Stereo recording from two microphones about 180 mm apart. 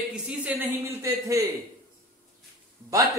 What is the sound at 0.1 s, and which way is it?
Speech, 5° right (ahead or behind).